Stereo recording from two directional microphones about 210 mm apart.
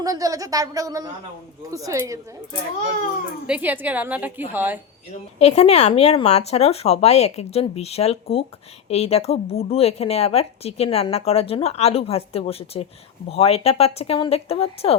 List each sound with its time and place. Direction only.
0.0 s a woman's voice: 15° right (ahead or behind)
3.4 s a woman's voice: 5° right (ahead or behind)
5.4 s a woman's voice: 30° left (ahead or behind)